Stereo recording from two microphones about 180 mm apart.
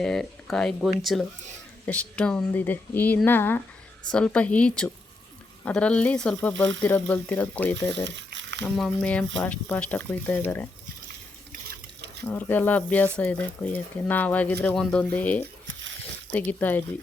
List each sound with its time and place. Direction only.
0.0 s speech: centre (ahead or behind)
8.3 s a sound: 80° right
8.6 s speech: 5° left (ahead or behind)
12.2 s speech: 10° left (ahead or behind)